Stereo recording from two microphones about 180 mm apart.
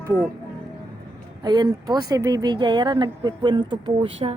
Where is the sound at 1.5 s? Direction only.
25° right (ahead or behind).